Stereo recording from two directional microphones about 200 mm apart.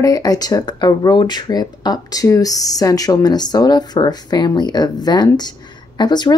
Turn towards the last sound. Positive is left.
turn(degrees=20)  # may be behind; listen again after turning